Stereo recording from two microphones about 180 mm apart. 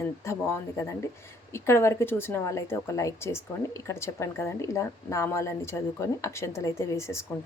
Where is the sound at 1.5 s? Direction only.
15° left (ahead or behind).